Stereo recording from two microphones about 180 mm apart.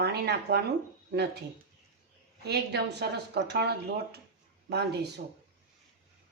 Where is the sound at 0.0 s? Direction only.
65° right (ahead or behind).